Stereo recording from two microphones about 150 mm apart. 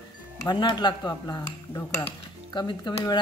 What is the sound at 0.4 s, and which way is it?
Speech, 30° left (ahead or behind).